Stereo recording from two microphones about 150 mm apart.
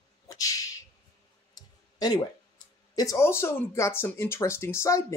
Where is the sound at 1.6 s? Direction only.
25° left (ahead or behind).